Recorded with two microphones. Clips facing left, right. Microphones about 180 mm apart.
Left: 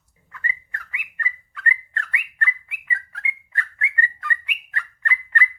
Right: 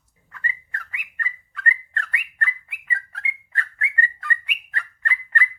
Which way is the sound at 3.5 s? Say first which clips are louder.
Even; 35° right (ahead or behind).